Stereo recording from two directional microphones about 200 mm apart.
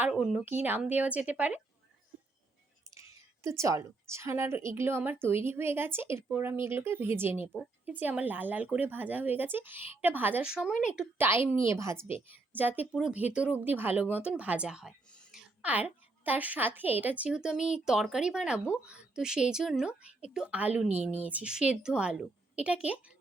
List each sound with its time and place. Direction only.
0.0 s a woman's voice: 5° right (ahead or behind)
2.9 s a woman's voice: 15° right (ahead or behind)
20.8 s speech: 35° right (ahead or behind)
21.2 s a woman's voice: 5° right (ahead or behind)